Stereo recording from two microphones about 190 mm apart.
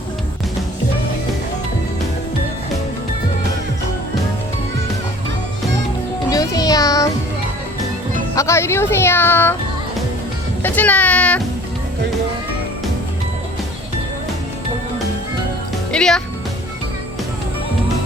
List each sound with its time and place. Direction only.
6.3 s a sound: 20° left (ahead or behind)
8.4 s speech: 15° left (ahead or behind)
10.6 s speech: 10° left (ahead or behind)
15.9 s speech: 5° left (ahead or behind)